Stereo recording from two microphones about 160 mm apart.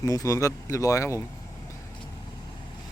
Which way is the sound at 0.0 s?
20° left (ahead or behind).